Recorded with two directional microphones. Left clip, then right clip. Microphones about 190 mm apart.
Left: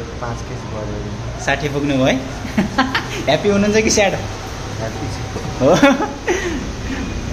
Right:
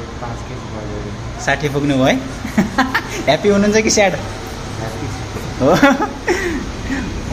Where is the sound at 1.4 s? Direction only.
15° right (ahead or behind).